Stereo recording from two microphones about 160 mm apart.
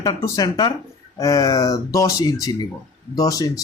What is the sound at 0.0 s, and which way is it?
A man's voice, 20° left (ahead or behind).